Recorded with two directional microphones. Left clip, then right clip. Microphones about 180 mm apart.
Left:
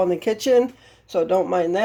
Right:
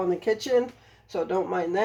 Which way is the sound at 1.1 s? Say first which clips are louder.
Left 7 dB; 60° left (ahead or behind).